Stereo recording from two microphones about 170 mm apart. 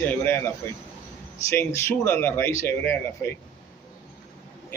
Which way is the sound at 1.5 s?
15° left (ahead or behind).